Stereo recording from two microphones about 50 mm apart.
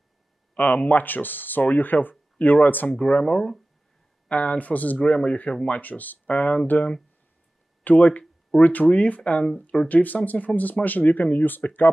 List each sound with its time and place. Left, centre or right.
0.6 s speech: left
2.9 s speech: left
3.3 s speech: centre
4.3 s speech: left
4.9 s speech: left
7.8 s speech: left
9.8 s speech: left